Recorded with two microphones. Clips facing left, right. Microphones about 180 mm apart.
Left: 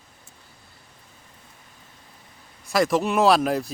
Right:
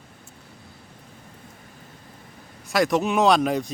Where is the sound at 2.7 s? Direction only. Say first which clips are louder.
Even; centre (ahead or behind).